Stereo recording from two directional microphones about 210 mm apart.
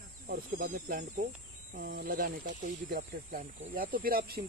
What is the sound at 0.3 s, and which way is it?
Speech, 45° right (ahead or behind).